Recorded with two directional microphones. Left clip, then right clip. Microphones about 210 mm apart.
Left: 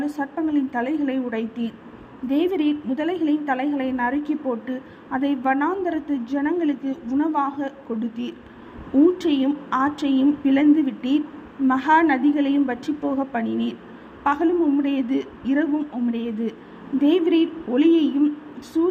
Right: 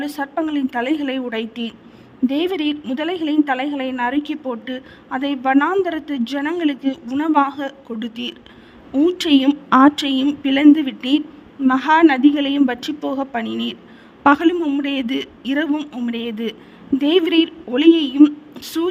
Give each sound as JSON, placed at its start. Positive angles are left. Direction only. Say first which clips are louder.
{"t": 0.0, "sound": "a woman's voice", "louder": "right 3 dB", "side_deg": -45}